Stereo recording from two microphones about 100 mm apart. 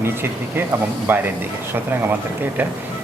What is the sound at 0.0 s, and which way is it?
Speech, 25° right (ahead or behind).